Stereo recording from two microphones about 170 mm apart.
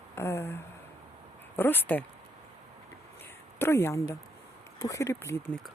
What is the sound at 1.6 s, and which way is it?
Speech, 10° left (ahead or behind).